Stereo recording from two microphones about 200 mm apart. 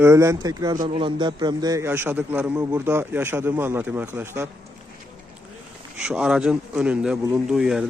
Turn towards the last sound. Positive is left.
turn(degrees=0)  # may be behind; listen again after turning